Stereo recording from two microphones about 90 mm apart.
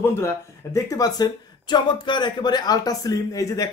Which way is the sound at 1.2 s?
55° left (ahead or behind).